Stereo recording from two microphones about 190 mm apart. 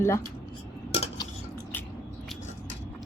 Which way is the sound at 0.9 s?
35° left (ahead or behind).